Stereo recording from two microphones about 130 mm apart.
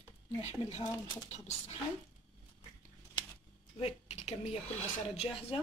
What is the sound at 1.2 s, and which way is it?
Speech, 55° left (ahead or behind).